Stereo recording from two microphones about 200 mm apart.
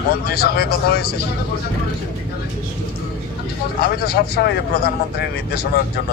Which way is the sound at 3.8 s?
50° left (ahead or behind).